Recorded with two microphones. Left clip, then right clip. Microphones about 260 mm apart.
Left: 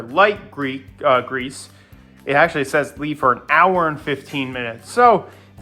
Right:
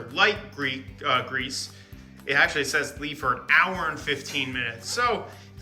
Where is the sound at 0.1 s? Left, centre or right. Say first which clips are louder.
Left 7 dB; centre.